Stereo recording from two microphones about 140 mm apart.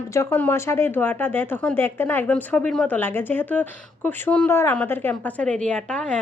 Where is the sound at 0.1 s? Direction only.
20° left (ahead or behind).